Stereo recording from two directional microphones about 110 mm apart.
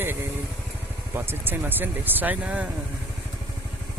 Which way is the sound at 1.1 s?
20° right (ahead or behind).